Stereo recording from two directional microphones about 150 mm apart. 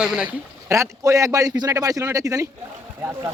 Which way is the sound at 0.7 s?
20° right (ahead or behind).